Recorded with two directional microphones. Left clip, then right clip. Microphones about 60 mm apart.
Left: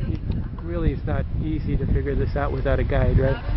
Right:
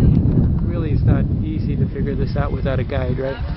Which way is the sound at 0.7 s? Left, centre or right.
Centre.